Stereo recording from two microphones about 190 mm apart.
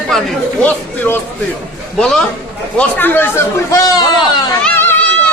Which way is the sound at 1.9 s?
5° left (ahead or behind).